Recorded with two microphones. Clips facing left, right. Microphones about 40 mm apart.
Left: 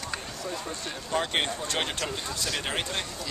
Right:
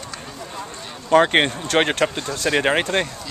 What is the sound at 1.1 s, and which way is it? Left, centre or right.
Speech, right.